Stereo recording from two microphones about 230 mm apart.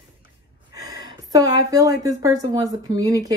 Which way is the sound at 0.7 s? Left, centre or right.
Centre.